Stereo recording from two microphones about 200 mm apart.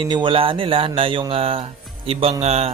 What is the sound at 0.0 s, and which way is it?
Speech, 25° right (ahead or behind).